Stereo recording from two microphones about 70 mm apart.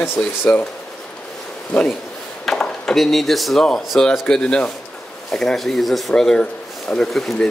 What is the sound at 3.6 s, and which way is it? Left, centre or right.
Speech, centre.